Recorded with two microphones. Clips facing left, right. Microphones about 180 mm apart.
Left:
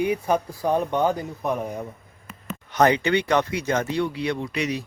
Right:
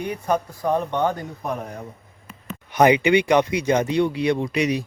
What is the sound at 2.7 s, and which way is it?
Speech, 10° right (ahead or behind).